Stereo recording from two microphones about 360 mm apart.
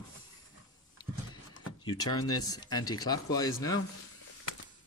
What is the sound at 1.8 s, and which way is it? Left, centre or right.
Speech, centre.